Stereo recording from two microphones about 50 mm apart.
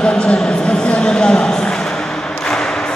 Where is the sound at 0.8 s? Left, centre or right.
Centre.